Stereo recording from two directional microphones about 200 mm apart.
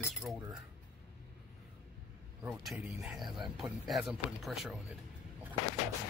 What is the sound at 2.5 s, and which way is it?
Speech, centre (ahead or behind).